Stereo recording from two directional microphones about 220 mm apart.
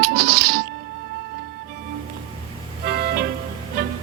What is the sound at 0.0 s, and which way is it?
Music, 45° right (ahead or behind).